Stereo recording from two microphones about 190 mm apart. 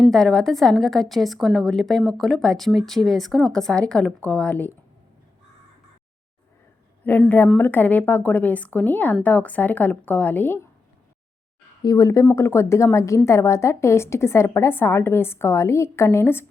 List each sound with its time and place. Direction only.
0.0 s a woman's voice: centre (ahead or behind)
7.0 s a woman's voice: 10° left (ahead or behind)
11.8 s a woman's voice: 20° left (ahead or behind)